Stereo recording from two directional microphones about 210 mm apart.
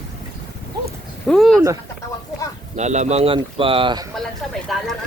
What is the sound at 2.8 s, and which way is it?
Speech, 35° right (ahead or behind).